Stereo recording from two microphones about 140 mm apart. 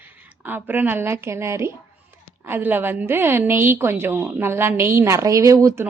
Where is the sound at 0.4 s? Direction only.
15° right (ahead or behind).